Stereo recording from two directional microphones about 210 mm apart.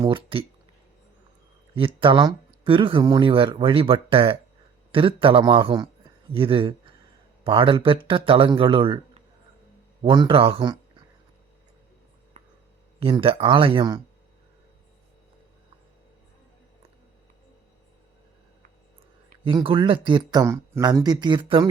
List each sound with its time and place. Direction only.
0.0 s speech: 25° right (ahead or behind)
1.7 s speech: 25° right (ahead or behind)
10.0 s speech: 20° right (ahead or behind)
12.4 s a sound: 35° right (ahead or behind)
13.0 s speech: 25° right (ahead or behind)
19.5 s speech: 25° right (ahead or behind)